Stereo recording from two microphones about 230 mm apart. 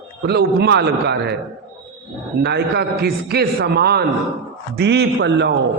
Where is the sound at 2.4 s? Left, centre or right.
Right.